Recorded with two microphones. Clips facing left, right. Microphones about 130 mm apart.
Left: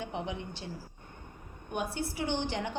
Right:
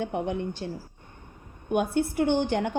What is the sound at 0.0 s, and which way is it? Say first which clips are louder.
Speech: right 8 dB; 55° right (ahead or behind).